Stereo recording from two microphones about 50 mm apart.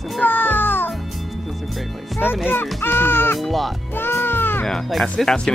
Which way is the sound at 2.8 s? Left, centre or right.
Left.